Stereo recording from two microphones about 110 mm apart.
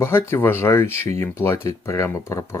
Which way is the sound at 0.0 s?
25° left (ahead or behind).